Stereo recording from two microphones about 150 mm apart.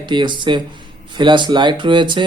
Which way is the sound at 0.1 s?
30° right (ahead or behind).